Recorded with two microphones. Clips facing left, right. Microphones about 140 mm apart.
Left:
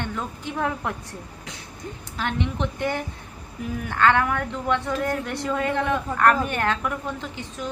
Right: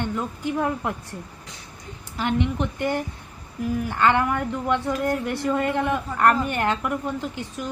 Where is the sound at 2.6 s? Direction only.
10° right (ahead or behind).